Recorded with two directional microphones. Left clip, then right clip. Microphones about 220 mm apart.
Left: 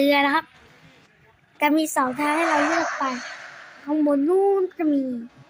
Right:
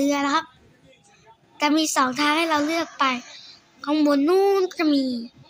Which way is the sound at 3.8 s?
10° right (ahead or behind).